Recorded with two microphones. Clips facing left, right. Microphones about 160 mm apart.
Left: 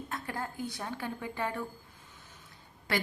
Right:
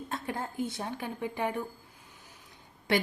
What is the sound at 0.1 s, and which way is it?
A woman's voice, 25° right (ahead or behind).